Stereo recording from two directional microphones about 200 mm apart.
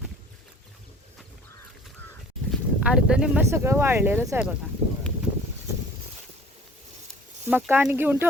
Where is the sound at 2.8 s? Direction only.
5° right (ahead or behind).